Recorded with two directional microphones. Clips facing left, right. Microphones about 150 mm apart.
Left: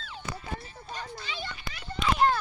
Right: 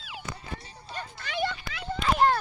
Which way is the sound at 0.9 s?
55° right (ahead or behind).